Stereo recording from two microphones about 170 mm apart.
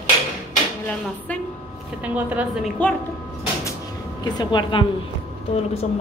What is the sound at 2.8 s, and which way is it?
Speech, 5° left (ahead or behind).